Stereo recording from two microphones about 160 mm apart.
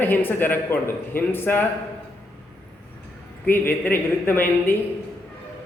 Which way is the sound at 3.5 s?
15° left (ahead or behind).